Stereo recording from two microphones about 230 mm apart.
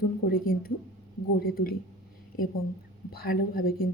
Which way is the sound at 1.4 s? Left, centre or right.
Left.